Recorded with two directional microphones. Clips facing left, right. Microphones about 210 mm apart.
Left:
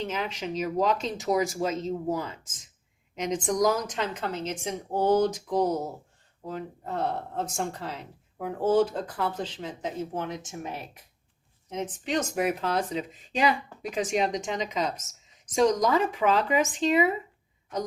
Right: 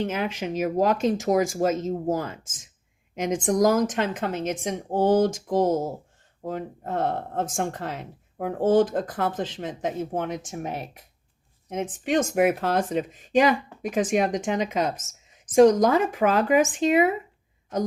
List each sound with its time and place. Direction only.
0.0 s speech: 50° right (ahead or behind)
11.7 s speech: 50° right (ahead or behind)